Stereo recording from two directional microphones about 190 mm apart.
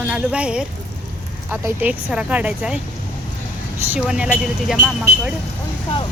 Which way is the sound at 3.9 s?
5° right (ahead or behind).